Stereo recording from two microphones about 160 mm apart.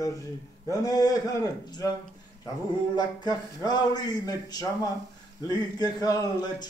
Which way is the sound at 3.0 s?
25° left (ahead or behind).